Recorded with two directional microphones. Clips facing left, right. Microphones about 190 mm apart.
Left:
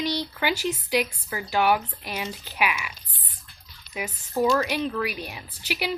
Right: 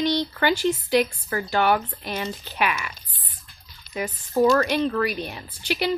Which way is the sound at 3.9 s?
10° left (ahead or behind).